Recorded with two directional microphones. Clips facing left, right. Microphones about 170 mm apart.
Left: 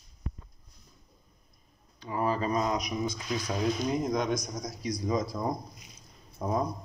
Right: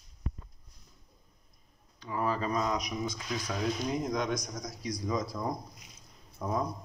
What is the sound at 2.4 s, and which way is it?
Speech, 15° left (ahead or behind).